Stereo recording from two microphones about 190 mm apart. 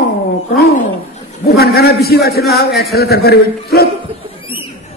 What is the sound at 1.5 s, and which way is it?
A man's voice, 55° left (ahead or behind).